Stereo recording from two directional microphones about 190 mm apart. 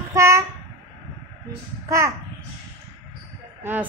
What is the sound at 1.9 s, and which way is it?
Speech, 15° right (ahead or behind).